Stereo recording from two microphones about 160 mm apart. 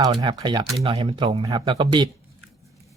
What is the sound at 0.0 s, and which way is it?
Speech, 25° right (ahead or behind).